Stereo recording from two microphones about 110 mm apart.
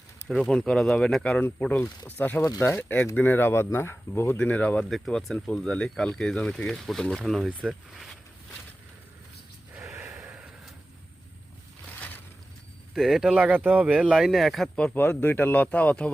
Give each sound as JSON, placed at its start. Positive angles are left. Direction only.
{"t": 0.3, "sound": "speech", "side_deg": 0}
{"t": 9.9, "sound": "gasp", "side_deg": -25}
{"t": 10.2, "sound": "a sound", "side_deg": -15}
{"t": 11.9, "sound": "a sound", "side_deg": 15}
{"t": 12.9, "sound": "speech", "side_deg": -5}
{"t": 14.9, "sound": "speech", "side_deg": 20}